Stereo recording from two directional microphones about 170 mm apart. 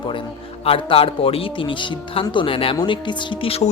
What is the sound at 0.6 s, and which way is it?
A man's voice, 35° left (ahead or behind).